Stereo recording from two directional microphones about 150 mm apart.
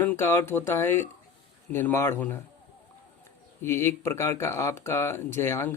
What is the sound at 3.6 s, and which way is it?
Speech, 15° left (ahead or behind).